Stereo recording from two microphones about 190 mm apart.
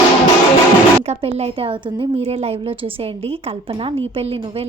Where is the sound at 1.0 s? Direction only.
35° right (ahead or behind).